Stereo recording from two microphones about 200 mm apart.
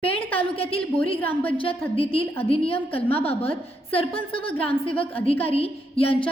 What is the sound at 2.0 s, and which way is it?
A woman's voice, 30° left (ahead or behind).